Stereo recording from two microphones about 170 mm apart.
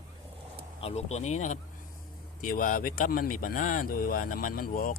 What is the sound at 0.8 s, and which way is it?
Speech, 40° left (ahead or behind).